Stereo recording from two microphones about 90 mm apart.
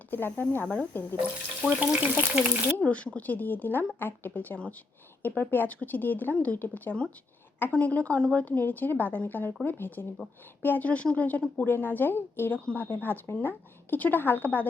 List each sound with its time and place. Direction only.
0.1 s a woman's voice: 20° left (ahead or behind)
1.6 s frying: 10° right (ahead or behind)
2.7 s a woman's voice: 15° left (ahead or behind)